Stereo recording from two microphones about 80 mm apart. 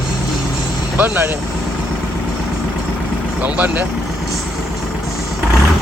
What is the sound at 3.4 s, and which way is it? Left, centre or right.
Speech, centre.